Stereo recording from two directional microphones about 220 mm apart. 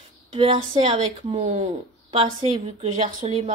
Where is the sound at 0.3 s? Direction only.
25° right (ahead or behind).